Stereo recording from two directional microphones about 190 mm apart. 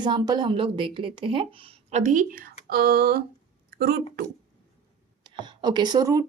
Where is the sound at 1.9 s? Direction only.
40° right (ahead or behind).